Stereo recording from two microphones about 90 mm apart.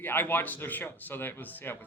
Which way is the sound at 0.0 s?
25° left (ahead or behind).